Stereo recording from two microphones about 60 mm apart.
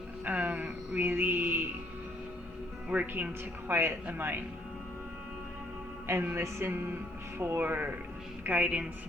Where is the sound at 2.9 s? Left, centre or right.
Right.